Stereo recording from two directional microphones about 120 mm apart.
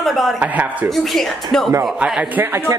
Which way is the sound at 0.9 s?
Centre (ahead or behind).